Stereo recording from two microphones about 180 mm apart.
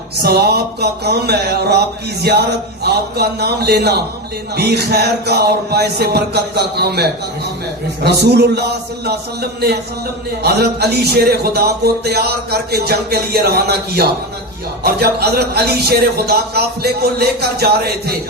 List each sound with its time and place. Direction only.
0.2 s a man's voice: 60° right (ahead or behind)